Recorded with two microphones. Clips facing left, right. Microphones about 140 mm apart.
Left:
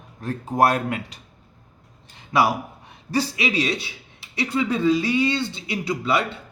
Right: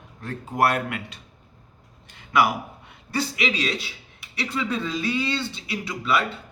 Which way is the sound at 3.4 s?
20° left (ahead or behind).